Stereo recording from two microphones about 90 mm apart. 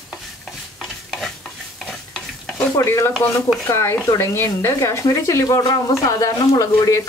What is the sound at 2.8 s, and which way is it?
Speech, 30° left (ahead or behind).